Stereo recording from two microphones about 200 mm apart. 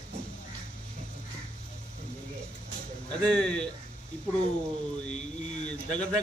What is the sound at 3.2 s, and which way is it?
Speech, 5° left (ahead or behind).